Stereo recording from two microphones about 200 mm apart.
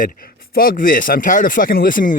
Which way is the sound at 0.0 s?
45° left (ahead or behind).